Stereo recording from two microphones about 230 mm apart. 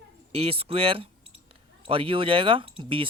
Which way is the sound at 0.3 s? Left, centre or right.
Right.